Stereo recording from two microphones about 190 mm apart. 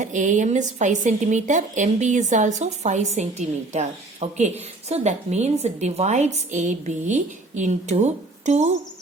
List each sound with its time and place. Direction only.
0.0 s speech: 40° right (ahead or behind)